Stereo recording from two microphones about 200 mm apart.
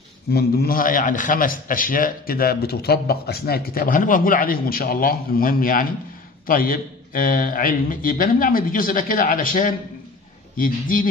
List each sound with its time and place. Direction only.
0.3 s a man's voice: 50° left (ahead or behind)